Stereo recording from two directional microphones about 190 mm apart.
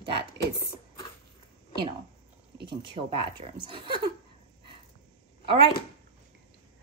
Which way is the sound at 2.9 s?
30° right (ahead or behind).